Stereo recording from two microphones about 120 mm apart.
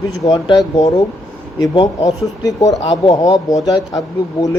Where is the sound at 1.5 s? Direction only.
30° left (ahead or behind).